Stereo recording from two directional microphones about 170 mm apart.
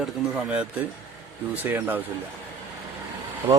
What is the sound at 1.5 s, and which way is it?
Speech, 10° right (ahead or behind).